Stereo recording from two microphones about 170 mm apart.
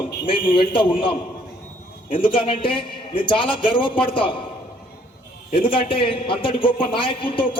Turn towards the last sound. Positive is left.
turn(degrees=30)  # may be behind; listen again after turning